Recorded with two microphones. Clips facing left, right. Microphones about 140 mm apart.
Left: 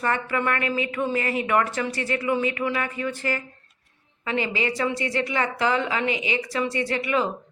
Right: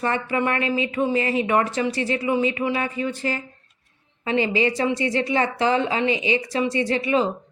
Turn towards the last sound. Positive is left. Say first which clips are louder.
# right 3 dB
turn(degrees=-25)  # may be behind; listen again after turning